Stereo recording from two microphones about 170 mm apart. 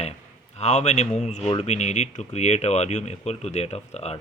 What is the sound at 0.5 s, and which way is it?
Speech, 40° left (ahead or behind).